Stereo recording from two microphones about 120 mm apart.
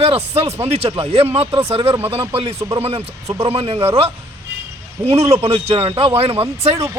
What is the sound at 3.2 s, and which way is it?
Speech, 25° right (ahead or behind).